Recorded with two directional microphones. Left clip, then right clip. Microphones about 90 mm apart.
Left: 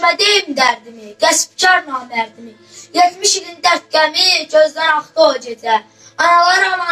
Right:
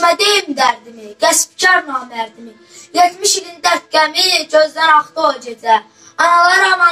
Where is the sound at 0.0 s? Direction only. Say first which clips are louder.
Right 1 dB; 35° right (ahead or behind).